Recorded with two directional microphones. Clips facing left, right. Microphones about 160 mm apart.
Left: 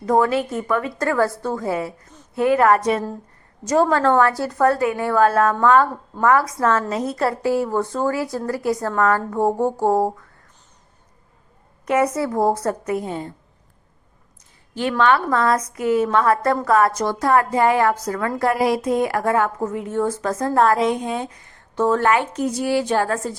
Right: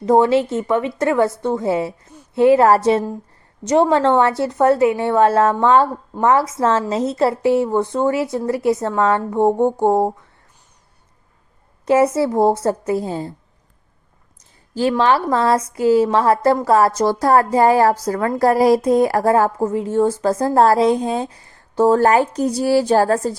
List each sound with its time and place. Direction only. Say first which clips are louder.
0.0 s speech: right 4 dB; 25° right (ahead or behind)
11.9 s speech: right 5 dB; 30° right (ahead or behind)
14.8 s a woman's voice: right 2 dB; 30° right (ahead or behind)